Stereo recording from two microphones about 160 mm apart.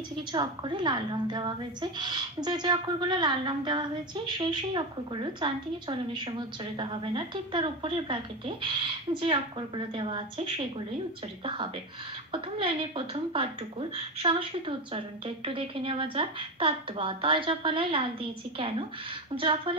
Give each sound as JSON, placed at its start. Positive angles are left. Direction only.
{"t": 0.3, "sound": "speech", "side_deg": -30}
{"t": 12.3, "sound": "speech", "side_deg": -30}
{"t": 19.3, "sound": "speech", "side_deg": -35}